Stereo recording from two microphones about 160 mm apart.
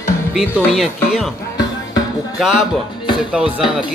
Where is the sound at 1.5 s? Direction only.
25° left (ahead or behind).